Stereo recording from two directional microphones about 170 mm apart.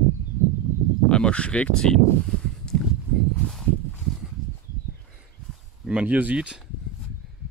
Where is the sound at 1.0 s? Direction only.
5° left (ahead or behind).